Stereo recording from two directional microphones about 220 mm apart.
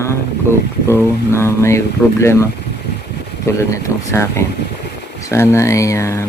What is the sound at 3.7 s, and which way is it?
Speech, 15° left (ahead or behind).